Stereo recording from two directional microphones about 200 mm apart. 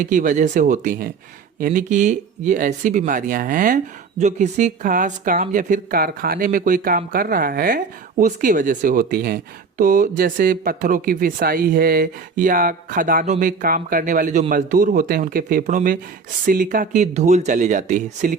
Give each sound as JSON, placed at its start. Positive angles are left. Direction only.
{"t": 0.0, "sound": "speech", "side_deg": -40}